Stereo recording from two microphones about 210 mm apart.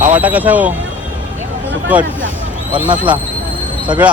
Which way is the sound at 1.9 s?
5° right (ahead or behind).